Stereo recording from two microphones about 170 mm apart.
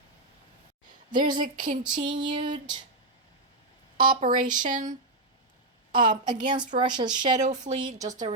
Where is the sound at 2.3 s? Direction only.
45° right (ahead or behind).